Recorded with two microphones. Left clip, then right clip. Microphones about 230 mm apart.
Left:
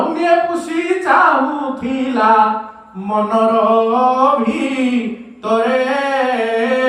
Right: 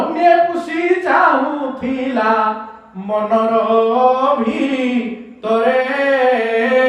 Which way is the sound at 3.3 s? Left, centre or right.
Centre.